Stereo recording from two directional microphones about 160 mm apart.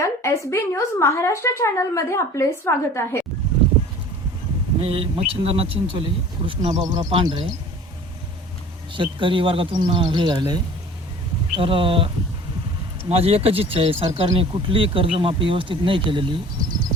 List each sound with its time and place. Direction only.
0.0 s a woman's voice: 15° left (ahead or behind)
4.8 s speech: 35° right (ahead or behind)
8.9 s speech: 30° right (ahead or behind)
13.1 s speech: 40° right (ahead or behind)